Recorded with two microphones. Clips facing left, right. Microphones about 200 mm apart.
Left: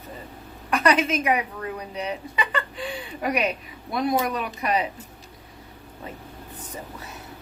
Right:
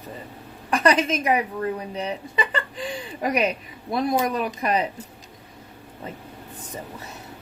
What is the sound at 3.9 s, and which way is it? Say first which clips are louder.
Speech: right 1 dB; 35° right (ahead or behind).